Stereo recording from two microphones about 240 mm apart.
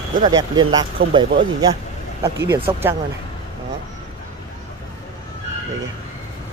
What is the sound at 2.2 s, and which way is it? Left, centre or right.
Speech, centre.